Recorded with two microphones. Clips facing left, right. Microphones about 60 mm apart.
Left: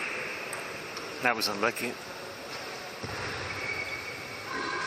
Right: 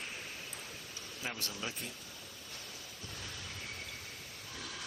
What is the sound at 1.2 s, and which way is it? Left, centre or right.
Speech, left.